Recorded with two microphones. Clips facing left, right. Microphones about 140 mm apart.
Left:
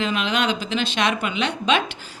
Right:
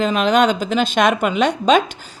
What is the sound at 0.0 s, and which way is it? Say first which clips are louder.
A woman's voice: right 8 dB; 45° right (ahead or behind).